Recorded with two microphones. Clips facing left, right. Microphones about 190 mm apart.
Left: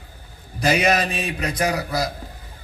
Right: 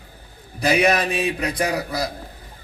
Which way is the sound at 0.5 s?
60° right (ahead or behind).